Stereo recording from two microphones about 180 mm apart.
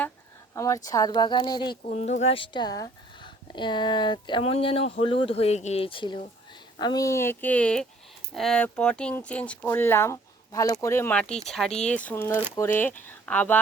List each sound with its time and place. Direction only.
0.5 s a woman's voice: 15° left (ahead or behind)
1.9 s speech: 40° left (ahead or behind); by 13.6 s 10° left (ahead or behind)